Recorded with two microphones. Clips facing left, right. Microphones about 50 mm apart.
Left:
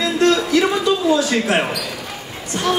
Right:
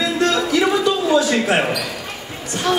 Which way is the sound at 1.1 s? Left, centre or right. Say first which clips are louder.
Right 1 dB; right.